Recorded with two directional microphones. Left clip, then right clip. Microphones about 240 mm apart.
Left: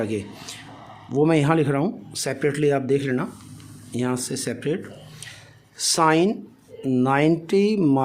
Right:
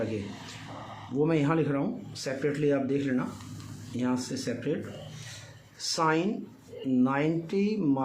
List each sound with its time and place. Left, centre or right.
0.0 s speech: left
5.8 s speech: left